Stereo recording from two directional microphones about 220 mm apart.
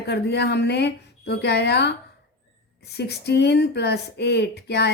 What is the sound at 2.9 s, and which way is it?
Speech, 50° left (ahead or behind).